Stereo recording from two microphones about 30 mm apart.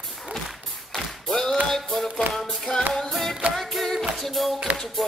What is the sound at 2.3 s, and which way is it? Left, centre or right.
Music, left.